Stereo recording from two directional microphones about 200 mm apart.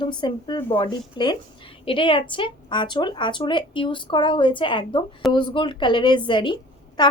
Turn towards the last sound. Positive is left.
turn(degrees=25)  # may be behind; listen again after turning